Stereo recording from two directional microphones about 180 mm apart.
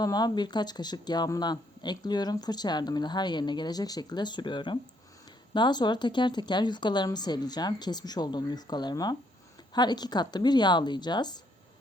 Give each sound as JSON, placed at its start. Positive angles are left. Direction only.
{"t": 0.0, "sound": "speech", "side_deg": 20}